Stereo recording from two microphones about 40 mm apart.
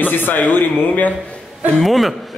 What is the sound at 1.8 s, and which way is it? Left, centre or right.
Speech, centre.